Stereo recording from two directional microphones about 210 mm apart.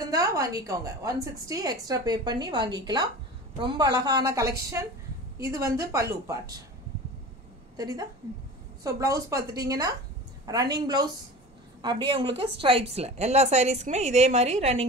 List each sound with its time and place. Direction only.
0.0 s a woman's voice: 15° right (ahead or behind)
7.7 s a woman's voice: 15° right (ahead or behind)